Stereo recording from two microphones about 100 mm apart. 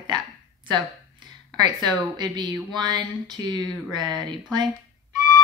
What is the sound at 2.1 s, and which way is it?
Speech, 45° right (ahead or behind).